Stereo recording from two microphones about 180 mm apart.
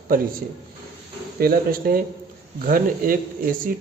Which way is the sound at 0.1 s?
50° right (ahead or behind).